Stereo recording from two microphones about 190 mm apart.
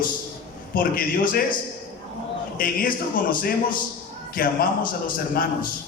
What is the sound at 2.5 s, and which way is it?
A man's voice, 45° left (ahead or behind).